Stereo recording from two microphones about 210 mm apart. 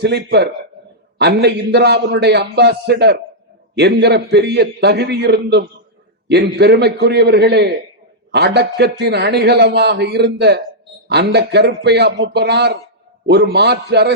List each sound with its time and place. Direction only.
0.0 s a man's voice: 50° right (ahead or behind)